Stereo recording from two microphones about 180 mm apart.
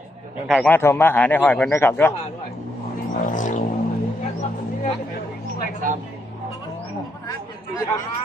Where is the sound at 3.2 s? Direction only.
45° left (ahead or behind).